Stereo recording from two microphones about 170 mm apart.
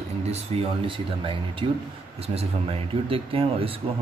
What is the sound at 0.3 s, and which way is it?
A man's voice, 40° right (ahead or behind).